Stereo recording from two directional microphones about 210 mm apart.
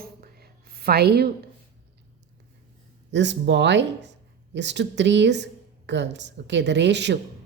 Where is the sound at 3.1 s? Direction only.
55° right (ahead or behind).